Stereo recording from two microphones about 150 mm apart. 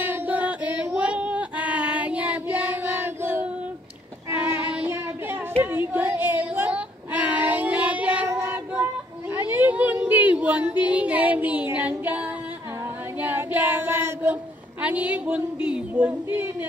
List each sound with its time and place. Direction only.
0.0 s singing: 10° right (ahead or behind)
4.3 s child singing: 15° right (ahead or behind)
5.6 s female singing: 15° right (ahead or behind)
8.3 s child singing: 15° right (ahead or behind)
9.3 s a sound: 15° right (ahead or behind)
13.2 s child singing: 10° right (ahead or behind)
14.8 s speech: 10° right (ahead or behind)